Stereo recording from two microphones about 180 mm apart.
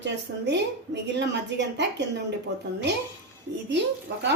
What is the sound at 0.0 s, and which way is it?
A woman's voice, 75° right (ahead or behind).